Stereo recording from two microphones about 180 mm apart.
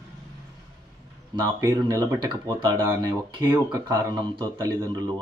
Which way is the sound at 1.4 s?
20° right (ahead or behind).